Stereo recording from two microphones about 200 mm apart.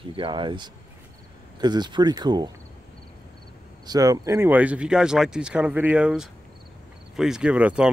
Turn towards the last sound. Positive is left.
turn(degrees=-5)  # may be behind; listen again after turning